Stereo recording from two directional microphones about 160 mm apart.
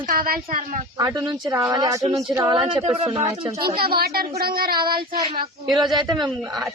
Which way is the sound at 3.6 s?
70° right (ahead or behind).